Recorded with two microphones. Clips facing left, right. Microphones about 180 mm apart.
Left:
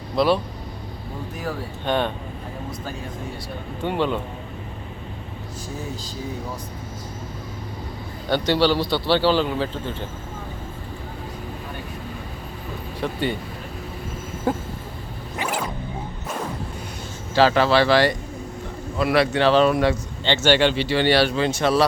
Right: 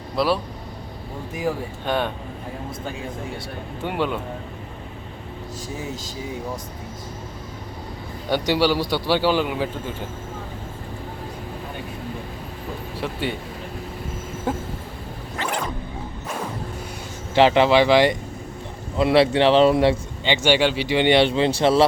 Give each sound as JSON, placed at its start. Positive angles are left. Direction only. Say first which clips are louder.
{"t": 0.2, "sound": "speech", "louder": "left 2 dB", "side_deg": -5}
{"t": 1.4, "sound": "a man's voice", "louder": "right 6 dB", "side_deg": -10}
{"t": 3.8, "sound": "a man's voice", "louder": "left 2 dB", "side_deg": -10}
{"t": 8.3, "sound": "a man's voice", "louder": "left 1 dB", "side_deg": -10}
{"t": 13.0, "sound": "speech", "louder": "left 2 dB", "side_deg": 0}
{"t": 14.5, "sound": "speech", "louder": "left 2 dB", "side_deg": 0}
{"t": 15.4, "sound": "music", "louder": "even", "side_deg": 5}
{"t": 17.3, "sound": "speech", "louder": "right 2 dB", "side_deg": -20}
{"t": 20.2, "sound": "speech", "louder": "left 1 dB", "side_deg": -10}